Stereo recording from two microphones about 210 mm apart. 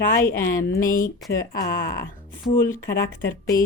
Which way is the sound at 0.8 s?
40° left (ahead or behind).